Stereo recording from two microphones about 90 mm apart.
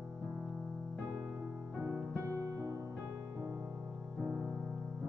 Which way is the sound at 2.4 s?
40° right (ahead or behind).